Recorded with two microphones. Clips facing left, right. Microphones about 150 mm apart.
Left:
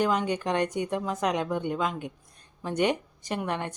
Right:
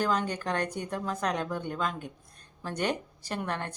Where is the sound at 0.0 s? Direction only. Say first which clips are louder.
Left 3 dB; 15° left (ahead or behind).